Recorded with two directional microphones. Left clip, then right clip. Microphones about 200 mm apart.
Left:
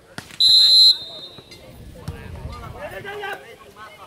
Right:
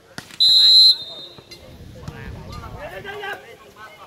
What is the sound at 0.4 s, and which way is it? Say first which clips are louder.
Smoke detector: right 1 dB; 20° left (ahead or behind).